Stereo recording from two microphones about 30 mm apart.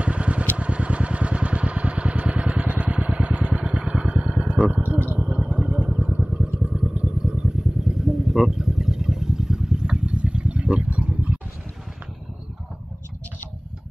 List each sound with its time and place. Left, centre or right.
0.0 s vehicle: right
7.4 s vehicle: right